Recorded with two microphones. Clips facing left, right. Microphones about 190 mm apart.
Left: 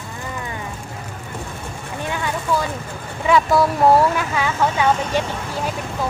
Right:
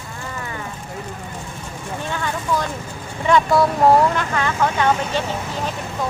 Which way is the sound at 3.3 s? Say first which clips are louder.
Even; centre (ahead or behind).